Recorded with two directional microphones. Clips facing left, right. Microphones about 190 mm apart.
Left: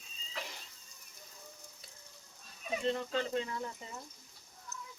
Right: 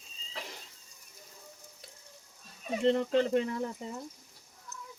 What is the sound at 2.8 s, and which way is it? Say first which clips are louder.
Speech: right 9 dB; 70° right (ahead or behind).